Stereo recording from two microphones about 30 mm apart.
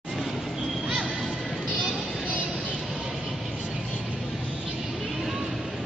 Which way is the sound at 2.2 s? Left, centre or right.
Right.